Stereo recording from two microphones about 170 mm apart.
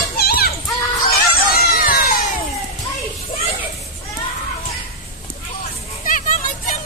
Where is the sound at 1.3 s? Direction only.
60° left (ahead or behind).